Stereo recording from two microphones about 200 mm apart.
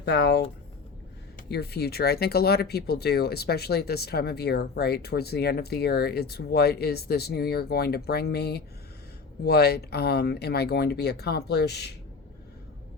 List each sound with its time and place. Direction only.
0.0 s speech: 60° left (ahead or behind)
1.5 s speech: 55° left (ahead or behind)